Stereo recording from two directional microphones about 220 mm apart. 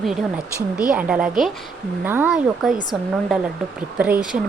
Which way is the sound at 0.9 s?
5° right (ahead or behind).